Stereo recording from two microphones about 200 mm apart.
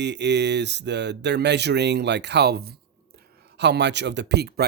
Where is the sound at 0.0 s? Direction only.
60° right (ahead or behind).